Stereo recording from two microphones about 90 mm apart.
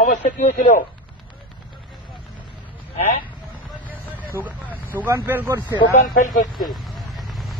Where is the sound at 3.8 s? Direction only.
20° right (ahead or behind).